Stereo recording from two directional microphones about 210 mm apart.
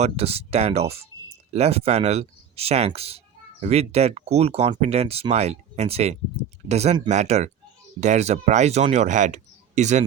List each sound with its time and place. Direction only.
0.0 s speech: 30° right (ahead or behind)